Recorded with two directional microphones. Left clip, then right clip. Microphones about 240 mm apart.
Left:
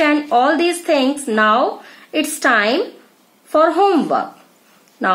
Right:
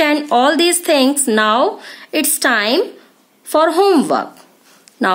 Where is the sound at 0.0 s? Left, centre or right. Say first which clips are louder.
Right 1 dB; right.